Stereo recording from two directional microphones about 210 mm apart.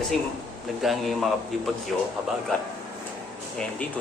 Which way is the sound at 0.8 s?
Centre (ahead or behind).